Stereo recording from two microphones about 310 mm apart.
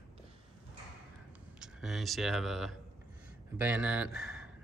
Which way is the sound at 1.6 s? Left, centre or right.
Centre.